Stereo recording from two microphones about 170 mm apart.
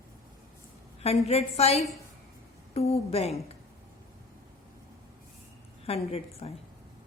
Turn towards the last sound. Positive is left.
turn(degrees=35)  # may be behind; listen again after turning